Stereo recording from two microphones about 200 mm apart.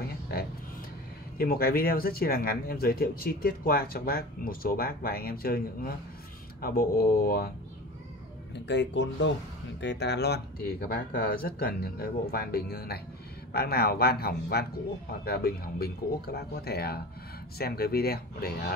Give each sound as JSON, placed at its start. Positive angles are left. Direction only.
{"t": 1.4, "sound": "speech", "side_deg": 50}
{"t": 8.5, "sound": "speech", "side_deg": 60}